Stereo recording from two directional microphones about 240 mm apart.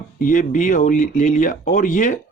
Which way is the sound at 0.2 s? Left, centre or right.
Left.